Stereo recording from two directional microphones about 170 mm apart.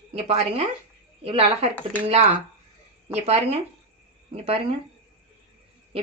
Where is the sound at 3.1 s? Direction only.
40° right (ahead or behind).